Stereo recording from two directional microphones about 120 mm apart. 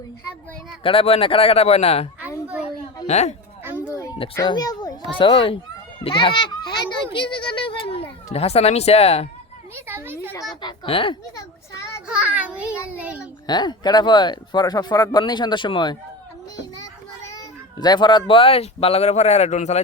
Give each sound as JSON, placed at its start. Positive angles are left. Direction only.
{"t": 0.8, "sound": "speech", "side_deg": 50}
{"t": 3.1, "sound": "speech", "side_deg": 70}
{"t": 3.8, "sound": "a sound", "side_deg": 25}
{"t": 4.4, "sound": "a child's voice", "side_deg": 35}
{"t": 5.1, "sound": "a child's voice", "side_deg": 50}
{"t": 9.7, "sound": "a woman's voice", "side_deg": -20}
{"t": 10.5, "sound": "speech", "side_deg": 40}
{"t": 10.8, "sound": "a child's voice", "side_deg": 50}
{"t": 12.0, "sound": "a child's voice", "side_deg": -10}
{"t": 13.5, "sound": "a child's voice", "side_deg": 35}